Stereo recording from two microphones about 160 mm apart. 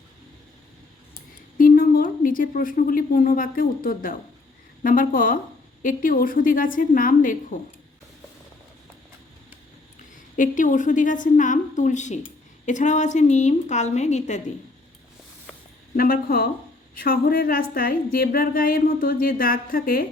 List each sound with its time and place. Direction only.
1.5 s a woman's voice: 60° left (ahead or behind)
10.3 s a woman's voice: 55° left (ahead or behind)
16.0 s a woman's voice: 65° left (ahead or behind)